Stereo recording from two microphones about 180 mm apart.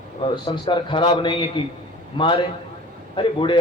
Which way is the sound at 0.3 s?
25° left (ahead or behind).